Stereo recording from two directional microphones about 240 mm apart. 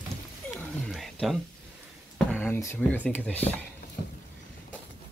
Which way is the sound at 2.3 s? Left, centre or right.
Centre.